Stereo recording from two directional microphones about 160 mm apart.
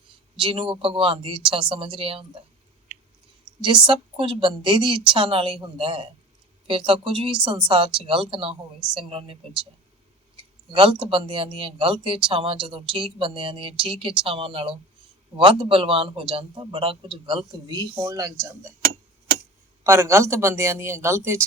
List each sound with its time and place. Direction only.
0.3 s speech: 35° right (ahead or behind)
2.9 s chewing: 90° right
3.6 s speech: 30° right (ahead or behind)
19.8 s speech: 15° right (ahead or behind)